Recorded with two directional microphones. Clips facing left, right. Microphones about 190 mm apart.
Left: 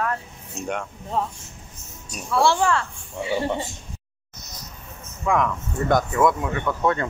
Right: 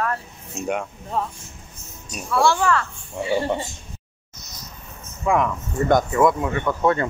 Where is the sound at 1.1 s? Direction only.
25° left (ahead or behind).